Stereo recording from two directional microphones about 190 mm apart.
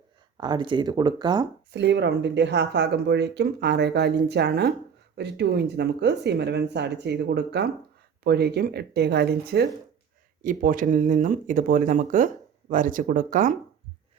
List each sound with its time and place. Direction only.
0.3 s speech: 20° right (ahead or behind)
1.7 s speech: 65° right (ahead or behind)
10.4 s speech: 45° right (ahead or behind)